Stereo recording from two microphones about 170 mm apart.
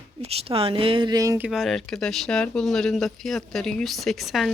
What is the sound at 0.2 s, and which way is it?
Speech, 35° right (ahead or behind).